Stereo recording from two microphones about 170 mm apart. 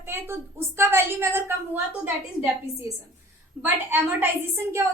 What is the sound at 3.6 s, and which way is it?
Speech, 10° right (ahead or behind).